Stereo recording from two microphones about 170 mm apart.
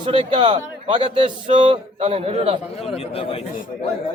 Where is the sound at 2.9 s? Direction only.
35° left (ahead or behind).